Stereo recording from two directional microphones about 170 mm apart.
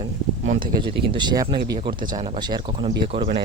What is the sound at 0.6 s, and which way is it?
Speech, 30° right (ahead or behind).